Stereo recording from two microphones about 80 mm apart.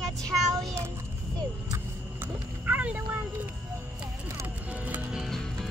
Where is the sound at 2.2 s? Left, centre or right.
Right.